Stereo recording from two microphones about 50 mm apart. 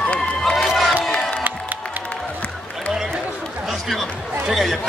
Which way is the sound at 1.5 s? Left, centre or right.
Right.